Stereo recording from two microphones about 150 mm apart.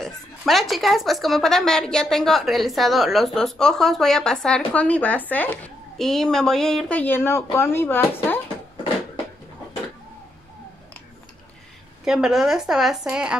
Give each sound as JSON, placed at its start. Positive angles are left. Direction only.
{"t": 0.0, "sound": "speech", "side_deg": 0}
{"t": 12.0, "sound": "speech", "side_deg": -5}